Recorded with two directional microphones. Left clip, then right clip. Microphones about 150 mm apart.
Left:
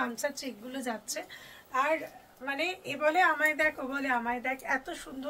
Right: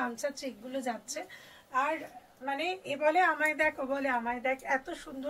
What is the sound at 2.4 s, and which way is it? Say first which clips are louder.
Speech: left 1 dB; 25° left (ahead or behind).